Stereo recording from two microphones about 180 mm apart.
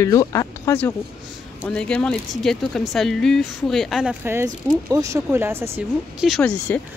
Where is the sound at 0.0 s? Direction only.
20° left (ahead or behind).